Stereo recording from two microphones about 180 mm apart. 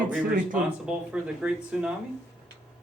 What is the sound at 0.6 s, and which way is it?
Speech, 5° right (ahead or behind).